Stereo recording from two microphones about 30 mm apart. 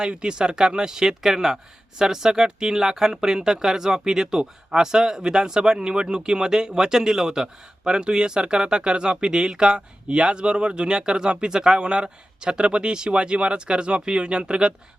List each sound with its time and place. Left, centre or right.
0.1 s speech: right
0.9 s speech: centre; by 14.7 s right